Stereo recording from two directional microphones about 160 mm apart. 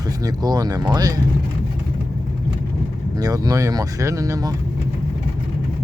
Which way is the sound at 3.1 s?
25° right (ahead or behind).